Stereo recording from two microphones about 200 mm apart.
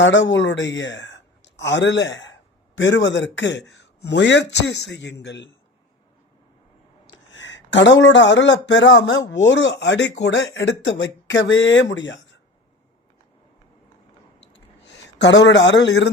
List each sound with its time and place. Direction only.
0.0 s speech: 65° left (ahead or behind)
7.1 s speech: 70° left (ahead or behind)
14.8 s speech: 65° left (ahead or behind)